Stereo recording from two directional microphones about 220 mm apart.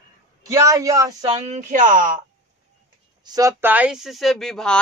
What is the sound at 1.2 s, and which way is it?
Speech, 30° right (ahead or behind).